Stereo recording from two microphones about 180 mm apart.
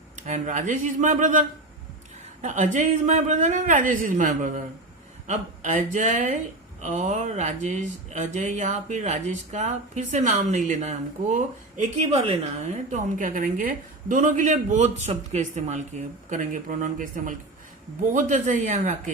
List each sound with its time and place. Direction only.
0.2 s a man's voice: 45° right (ahead or behind)